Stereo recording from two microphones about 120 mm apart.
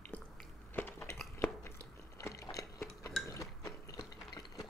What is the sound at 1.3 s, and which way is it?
Chewing, 20° left (ahead or behind).